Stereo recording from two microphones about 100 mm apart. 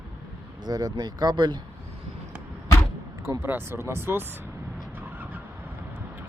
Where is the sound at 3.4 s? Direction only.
20° right (ahead or behind).